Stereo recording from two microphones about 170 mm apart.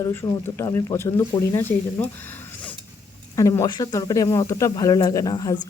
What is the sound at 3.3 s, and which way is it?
Speech, 20° left (ahead or behind).